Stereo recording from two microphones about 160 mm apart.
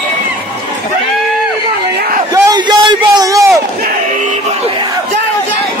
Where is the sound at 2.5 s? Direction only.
25° right (ahead or behind).